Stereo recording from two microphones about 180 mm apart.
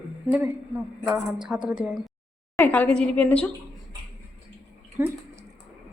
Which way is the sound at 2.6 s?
10° left (ahead or behind).